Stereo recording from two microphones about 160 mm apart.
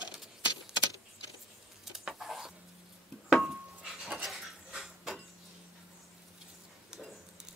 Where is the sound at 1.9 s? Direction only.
Centre (ahead or behind).